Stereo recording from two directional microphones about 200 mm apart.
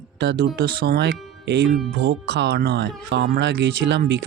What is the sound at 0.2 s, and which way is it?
Speech, 55° right (ahead or behind).